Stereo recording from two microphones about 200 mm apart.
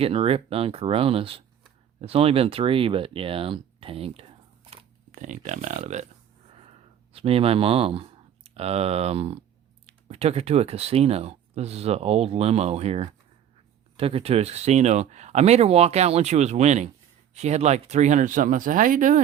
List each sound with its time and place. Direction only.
0.0 s speech: 30° right (ahead or behind)
6.5 s a sound: 30° right (ahead or behind)
10.1 s speech: 30° right (ahead or behind)